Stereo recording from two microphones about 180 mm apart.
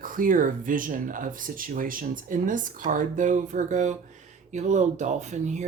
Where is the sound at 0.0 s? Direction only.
50° right (ahead or behind).